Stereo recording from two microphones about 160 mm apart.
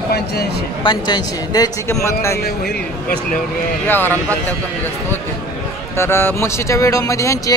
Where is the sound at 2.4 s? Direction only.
80° left.